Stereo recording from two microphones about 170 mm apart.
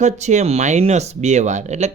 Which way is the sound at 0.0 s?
45° right (ahead or behind).